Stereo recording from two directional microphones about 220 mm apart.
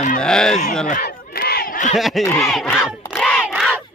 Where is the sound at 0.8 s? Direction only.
35° left (ahead or behind).